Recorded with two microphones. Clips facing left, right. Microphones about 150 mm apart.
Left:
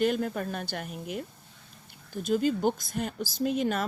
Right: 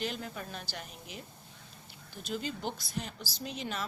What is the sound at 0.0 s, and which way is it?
A woman's voice, 55° left (ahead or behind).